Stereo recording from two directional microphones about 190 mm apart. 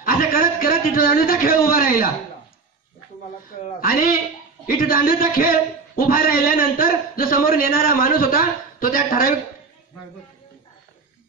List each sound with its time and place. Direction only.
0.0 s a man's voice: 45° left (ahead or behind)
3.6 s speech: 50° left (ahead or behind)